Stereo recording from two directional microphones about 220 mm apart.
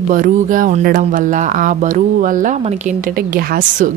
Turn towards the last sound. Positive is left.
turn(degrees=-40)  # may be behind; listen again after turning